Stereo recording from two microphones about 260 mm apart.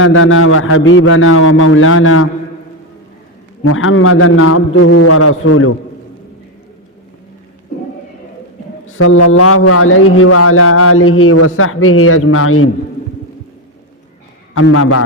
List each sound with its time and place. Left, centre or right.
0.0 s a man's voice: left
3.6 s a man's voice: left
8.9 s a man's voice: left
14.5 s a man's voice: left